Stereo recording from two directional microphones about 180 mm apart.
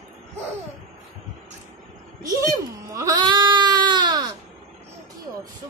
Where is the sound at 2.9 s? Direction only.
20° right (ahead or behind).